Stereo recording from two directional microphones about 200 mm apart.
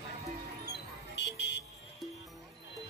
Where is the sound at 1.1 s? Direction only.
60° left (ahead or behind).